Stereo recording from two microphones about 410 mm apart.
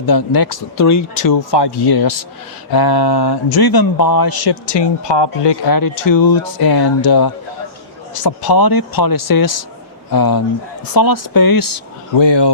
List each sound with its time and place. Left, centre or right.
0.0 s speech: left
1.2 s speech: left
12.1 s speech: left